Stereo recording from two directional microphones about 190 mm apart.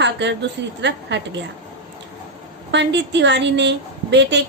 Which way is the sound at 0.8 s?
65° right (ahead or behind).